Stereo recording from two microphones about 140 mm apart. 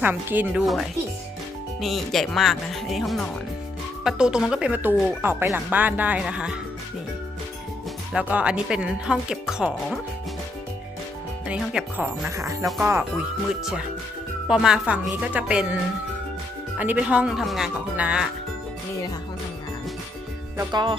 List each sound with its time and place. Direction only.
0.0 s speech: 15° right (ahead or behind)
0.6 s speech: centre (ahead or behind)
8.1 s speech: 10° right (ahead or behind)
11.4 s speech: 5° right (ahead or behind)
12.8 s speech: 15° right (ahead or behind)
13.5 s speech: 5° right (ahead or behind)